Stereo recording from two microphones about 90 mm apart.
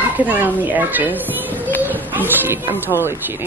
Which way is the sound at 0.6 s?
20° right (ahead or behind).